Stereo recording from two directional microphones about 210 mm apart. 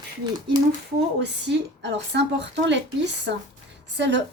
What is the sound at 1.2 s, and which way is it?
A woman's voice, 55° right (ahead or behind).